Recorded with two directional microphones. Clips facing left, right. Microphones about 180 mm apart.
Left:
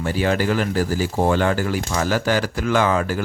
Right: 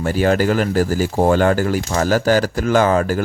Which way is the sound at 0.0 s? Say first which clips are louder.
Right 4 dB; 45° right (ahead or behind).